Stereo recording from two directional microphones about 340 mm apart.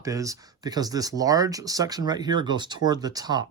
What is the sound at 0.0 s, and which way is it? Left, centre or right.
Speech, centre.